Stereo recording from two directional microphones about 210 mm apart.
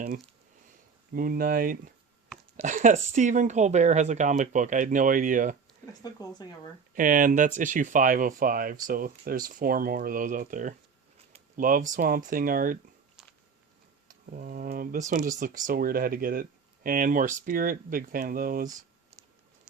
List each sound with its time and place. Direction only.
1.1 s speech: 45° right (ahead or behind)
6.0 s speech: 20° left (ahead or behind)
6.9 s speech: 40° right (ahead or behind)
14.1 s speech: 45° right (ahead or behind)